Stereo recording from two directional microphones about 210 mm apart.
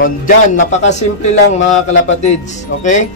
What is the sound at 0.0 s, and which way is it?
A man's voice, 35° left (ahead or behind).